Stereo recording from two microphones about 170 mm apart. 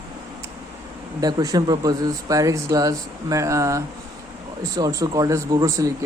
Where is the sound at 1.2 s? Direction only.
20° right (ahead or behind).